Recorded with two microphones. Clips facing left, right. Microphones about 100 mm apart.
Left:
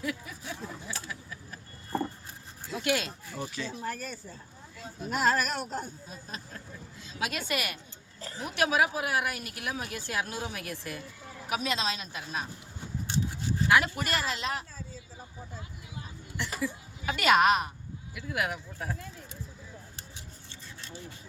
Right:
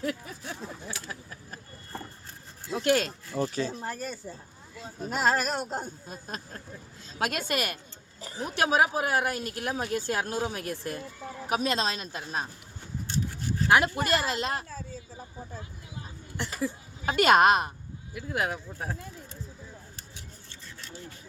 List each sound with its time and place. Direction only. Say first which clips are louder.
0.0 s a sound: right 3 dB; 40° right (ahead or behind)
1.0 s vehicle: right 1 dB; 45° right (ahead or behind)
2.7 s speech: right 5 dB; 40° right (ahead or behind)
6.1 s speech: right 3 dB; 45° right (ahead or behind)
8.2 s a woman's voice: right 3 dB; 15° right (ahead or behind)
8.5 s speech: right 2 dB; 35° right (ahead or behind)
13.7 s speech: right 3 dB; 35° right (ahead or behind)
16.6 s speech: right 2 dB; 35° right (ahead or behind)